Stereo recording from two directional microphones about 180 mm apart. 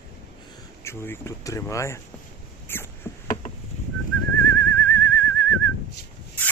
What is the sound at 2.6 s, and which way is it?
Rodents, 10° left (ahead or behind).